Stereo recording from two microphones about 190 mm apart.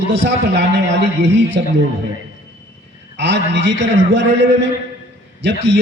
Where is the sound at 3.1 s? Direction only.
70° right (ahead or behind).